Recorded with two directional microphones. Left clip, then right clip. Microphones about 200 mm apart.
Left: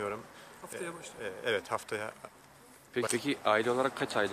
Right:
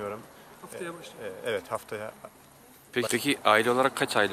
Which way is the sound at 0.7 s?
25° left (ahead or behind).